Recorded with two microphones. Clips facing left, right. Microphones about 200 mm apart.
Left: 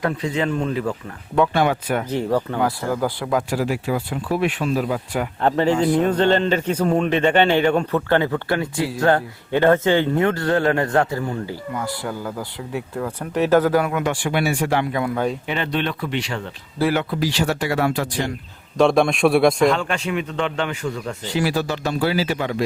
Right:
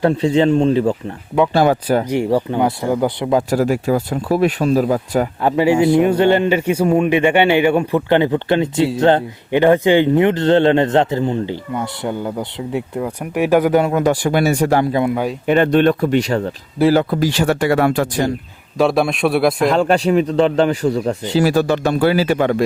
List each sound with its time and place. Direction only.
0.0 s speech: 30° right (ahead or behind)
2.0 s speech: 15° right (ahead or behind)
3.5 s speech: 45° right (ahead or behind)
5.4 s speech: 10° right (ahead or behind)
13.9 s speech: 40° right (ahead or behind)
15.0 s speech: 15° right (ahead or behind)
15.4 s speech: 50° right (ahead or behind)
18.8 s a man's voice: 5° right (ahead or behind)
19.7 s speech: 35° right (ahead or behind)
21.3 s speech: 45° right (ahead or behind)